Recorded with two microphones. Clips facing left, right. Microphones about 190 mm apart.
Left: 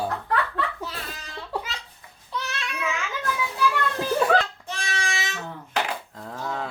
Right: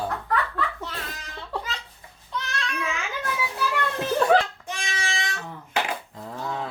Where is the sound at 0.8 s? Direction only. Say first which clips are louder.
Even; 5° left (ahead or behind).